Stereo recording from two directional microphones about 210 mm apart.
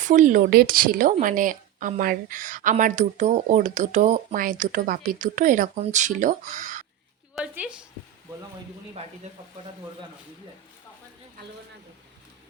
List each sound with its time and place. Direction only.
0.0 s a woman's voice: 40° right (ahead or behind)
7.3 s a woman's voice: 5° right (ahead or behind)